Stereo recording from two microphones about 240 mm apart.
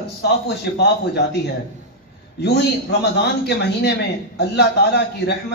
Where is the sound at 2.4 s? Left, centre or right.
Left.